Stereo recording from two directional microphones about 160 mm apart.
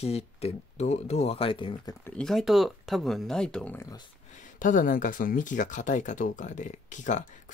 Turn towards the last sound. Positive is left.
turn(degrees=50)  # may be behind; listen again after turning